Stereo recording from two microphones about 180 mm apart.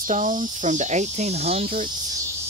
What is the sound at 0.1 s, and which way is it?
Speech, 40° right (ahead or behind).